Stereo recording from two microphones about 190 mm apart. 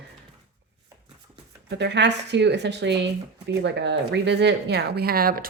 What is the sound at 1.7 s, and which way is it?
Speech, 65° right (ahead or behind).